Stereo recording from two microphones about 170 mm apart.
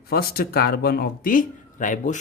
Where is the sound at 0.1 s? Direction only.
65° left (ahead or behind).